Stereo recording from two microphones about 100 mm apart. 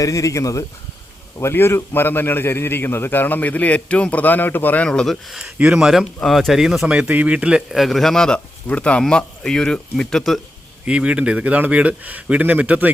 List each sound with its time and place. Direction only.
0.0 s a man's voice: 35° left (ahead or behind); by 10.4 s 5° left (ahead or behind)
10.8 s speech: 10° right (ahead or behind)